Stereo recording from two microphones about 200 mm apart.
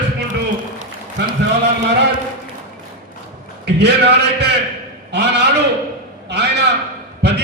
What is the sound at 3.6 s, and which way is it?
A man's voice, 55° right (ahead or behind).